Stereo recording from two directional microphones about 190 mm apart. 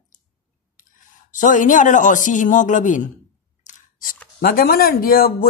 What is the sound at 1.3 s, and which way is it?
Speech, 40° left (ahead or behind).